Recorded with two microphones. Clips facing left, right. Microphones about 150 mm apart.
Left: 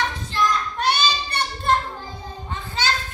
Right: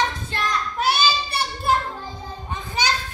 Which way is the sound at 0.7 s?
5° right (ahead or behind).